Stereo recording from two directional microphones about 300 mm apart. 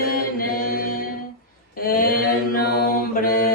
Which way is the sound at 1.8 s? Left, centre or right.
Left.